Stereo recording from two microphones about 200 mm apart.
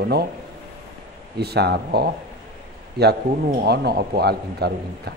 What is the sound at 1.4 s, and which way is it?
A man's voice, 55° right (ahead or behind).